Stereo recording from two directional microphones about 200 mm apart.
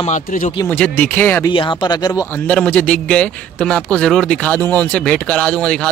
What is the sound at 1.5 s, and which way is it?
Speech, 25° left (ahead or behind).